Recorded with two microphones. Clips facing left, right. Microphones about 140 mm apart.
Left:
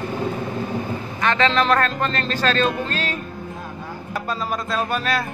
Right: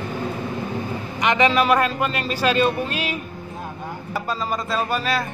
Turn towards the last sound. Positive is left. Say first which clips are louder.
# even
turn(degrees=0)  # may be behind; listen again after turning